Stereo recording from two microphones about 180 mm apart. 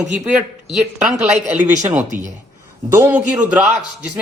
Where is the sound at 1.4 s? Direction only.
40° right (ahead or behind).